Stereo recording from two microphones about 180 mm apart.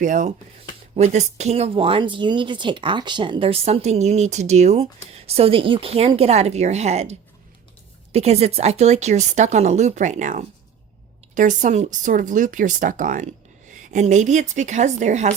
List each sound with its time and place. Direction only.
0.0 s speech: 45° right (ahead or behind)